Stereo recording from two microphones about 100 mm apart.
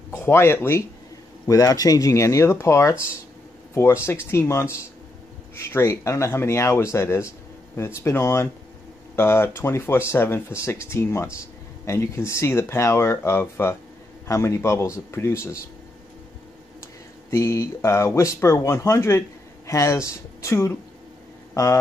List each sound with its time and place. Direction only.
0.3 s speech: 25° left (ahead or behind)
1.5 s speech: 40° left (ahead or behind)
17.3 s speech: 30° left (ahead or behind)